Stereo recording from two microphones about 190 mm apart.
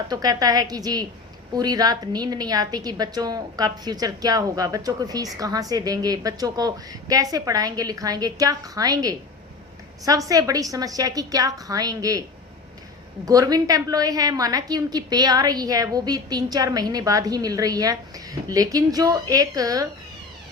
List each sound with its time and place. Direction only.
0.1 s a woman's voice: 20° right (ahead or behind)
13.2 s a woman's voice: 20° right (ahead or behind)